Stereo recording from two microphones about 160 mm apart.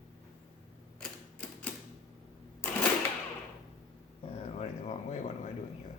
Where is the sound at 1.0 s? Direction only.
10° left (ahead or behind).